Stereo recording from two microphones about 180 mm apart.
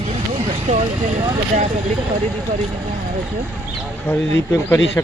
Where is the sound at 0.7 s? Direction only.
45° right (ahead or behind).